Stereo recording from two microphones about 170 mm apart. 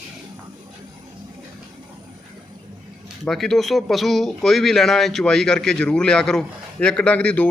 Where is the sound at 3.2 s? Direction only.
Centre (ahead or behind).